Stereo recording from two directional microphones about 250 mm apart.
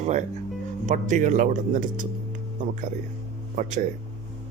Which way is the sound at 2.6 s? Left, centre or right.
Right.